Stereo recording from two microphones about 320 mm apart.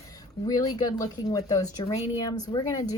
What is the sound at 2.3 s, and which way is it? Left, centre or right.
Speech, left.